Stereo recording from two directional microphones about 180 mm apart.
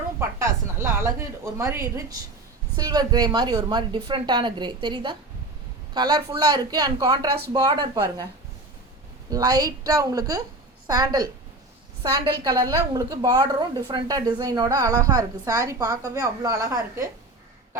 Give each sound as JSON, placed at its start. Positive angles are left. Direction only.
{"t": 0.2, "sound": "a sound", "side_deg": -15}
{"t": 1.5, "sound": "a woman's voice", "side_deg": -15}
{"t": 9.3, "sound": "a woman's voice", "side_deg": -20}
{"t": 12.4, "sound": "a woman's voice", "side_deg": -20}